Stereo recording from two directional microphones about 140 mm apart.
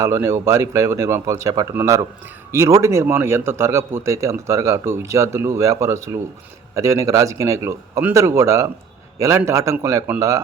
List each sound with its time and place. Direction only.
0.0 s a man's voice: 20° right (ahead or behind)